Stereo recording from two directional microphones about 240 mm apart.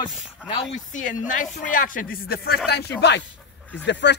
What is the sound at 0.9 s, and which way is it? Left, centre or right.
Speech, left.